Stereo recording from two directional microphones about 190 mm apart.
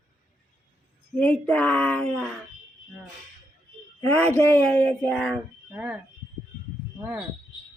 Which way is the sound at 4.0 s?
10° left (ahead or behind).